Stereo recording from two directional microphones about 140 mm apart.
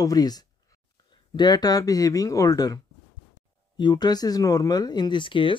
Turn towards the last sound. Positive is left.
turn(degrees=35)  # may be behind; listen again after turning